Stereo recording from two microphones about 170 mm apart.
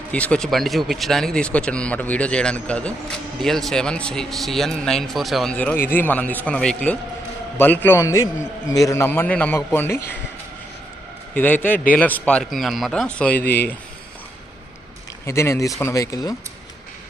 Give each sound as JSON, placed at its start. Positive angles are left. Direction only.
{"t": 0.1, "sound": "speech", "side_deg": 5}
{"t": 11.3, "sound": "speech", "side_deg": 10}
{"t": 15.3, "sound": "speech", "side_deg": 15}